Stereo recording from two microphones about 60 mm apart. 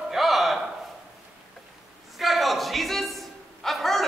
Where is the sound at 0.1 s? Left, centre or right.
Centre.